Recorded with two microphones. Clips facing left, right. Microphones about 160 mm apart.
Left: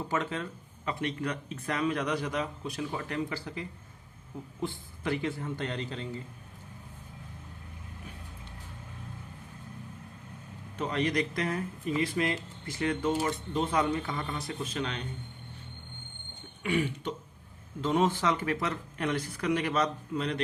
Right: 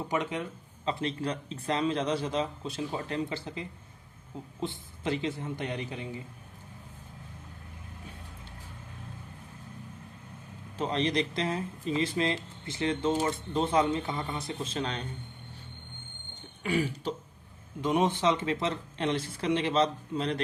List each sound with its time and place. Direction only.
0.0 s speech: 15° right (ahead or behind)
0.9 s speech: 30° right (ahead or behind)
10.8 s speech: 30° right (ahead or behind)
16.6 s speech: 35° right (ahead or behind)
17.7 s speech: 15° right (ahead or behind)